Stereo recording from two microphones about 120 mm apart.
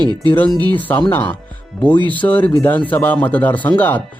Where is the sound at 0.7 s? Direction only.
15° left (ahead or behind).